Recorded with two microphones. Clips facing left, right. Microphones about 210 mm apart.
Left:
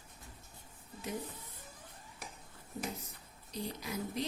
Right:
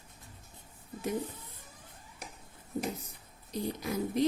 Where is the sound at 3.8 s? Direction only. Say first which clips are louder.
Right 8 dB; 50° right (ahead or behind).